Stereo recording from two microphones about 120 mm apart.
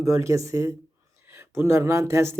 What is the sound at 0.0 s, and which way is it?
Speech, 25° right (ahead or behind).